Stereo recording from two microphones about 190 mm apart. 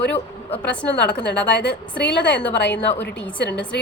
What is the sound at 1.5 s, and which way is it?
A woman's voice, 60° left (ahead or behind).